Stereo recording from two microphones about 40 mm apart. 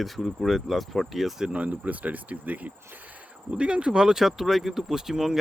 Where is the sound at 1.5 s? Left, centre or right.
Right.